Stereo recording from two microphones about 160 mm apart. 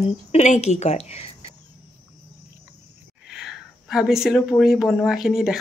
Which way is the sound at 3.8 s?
Centre (ahead or behind).